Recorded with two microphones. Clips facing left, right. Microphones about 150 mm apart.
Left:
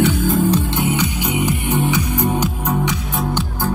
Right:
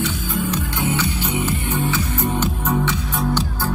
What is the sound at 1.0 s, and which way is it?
Music, 15° left (ahead or behind).